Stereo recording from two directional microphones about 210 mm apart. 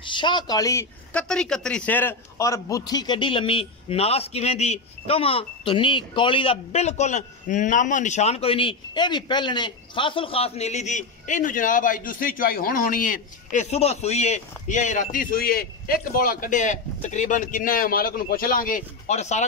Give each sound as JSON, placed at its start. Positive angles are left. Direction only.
{"t": 0.0, "sound": "speech", "side_deg": 20}
{"t": 1.2, "sound": "a man's voice", "side_deg": 5}